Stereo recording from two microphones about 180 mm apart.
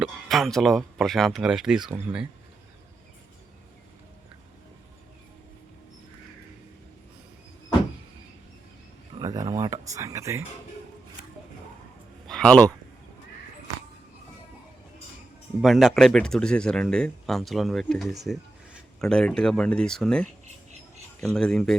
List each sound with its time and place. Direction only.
0.0 s speech: centre (ahead or behind)
9.1 s speech: 20° right (ahead or behind)
12.3 s speech: 5° left (ahead or behind)
15.6 s speech: centre (ahead or behind)